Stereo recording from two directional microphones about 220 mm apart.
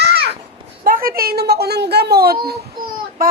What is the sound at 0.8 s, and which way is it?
Speech, 40° right (ahead or behind).